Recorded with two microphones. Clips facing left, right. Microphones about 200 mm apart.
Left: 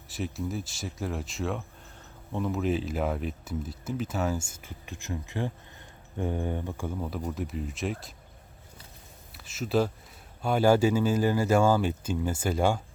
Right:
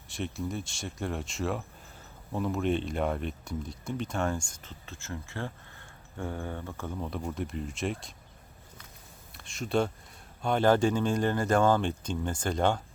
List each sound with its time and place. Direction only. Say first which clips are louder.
0.1 s speech: left 1 dB; centre (ahead or behind)
9.3 s speech: left 2 dB; 5° left (ahead or behind)